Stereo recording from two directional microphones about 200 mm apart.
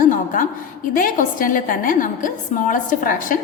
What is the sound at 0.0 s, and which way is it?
A woman's voice, 40° left (ahead or behind).